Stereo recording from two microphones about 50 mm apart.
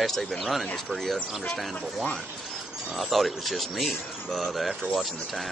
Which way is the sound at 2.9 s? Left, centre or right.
Centre.